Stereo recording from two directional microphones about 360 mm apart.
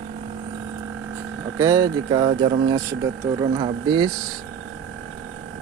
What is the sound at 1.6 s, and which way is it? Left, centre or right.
Speech, centre.